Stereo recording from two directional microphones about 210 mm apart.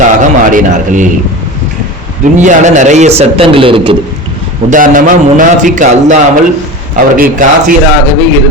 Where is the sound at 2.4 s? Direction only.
35° right (ahead or behind).